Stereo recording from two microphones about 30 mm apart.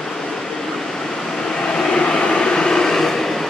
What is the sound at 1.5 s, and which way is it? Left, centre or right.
Vehicle, left.